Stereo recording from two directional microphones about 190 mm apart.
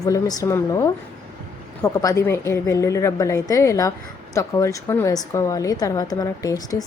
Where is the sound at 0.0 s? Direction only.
20° left (ahead or behind).